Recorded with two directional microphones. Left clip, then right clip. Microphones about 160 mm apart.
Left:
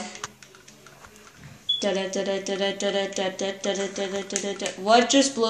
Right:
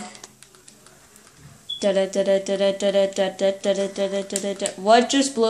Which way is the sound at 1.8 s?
60° right (ahead or behind).